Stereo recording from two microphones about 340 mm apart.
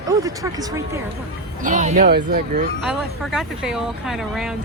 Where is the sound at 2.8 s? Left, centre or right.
Centre.